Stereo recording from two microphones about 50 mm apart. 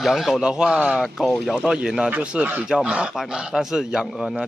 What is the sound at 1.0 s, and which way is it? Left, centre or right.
Speech, centre.